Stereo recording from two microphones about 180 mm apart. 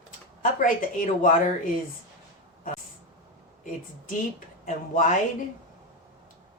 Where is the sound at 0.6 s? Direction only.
45° left (ahead or behind).